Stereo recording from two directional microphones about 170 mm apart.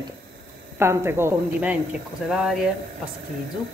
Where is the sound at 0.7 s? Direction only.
15° right (ahead or behind).